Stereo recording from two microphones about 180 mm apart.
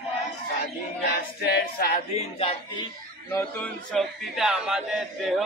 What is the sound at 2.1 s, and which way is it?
Speech, 30° left (ahead or behind).